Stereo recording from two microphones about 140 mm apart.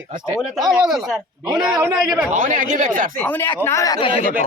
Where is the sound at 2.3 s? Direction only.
70° right (ahead or behind).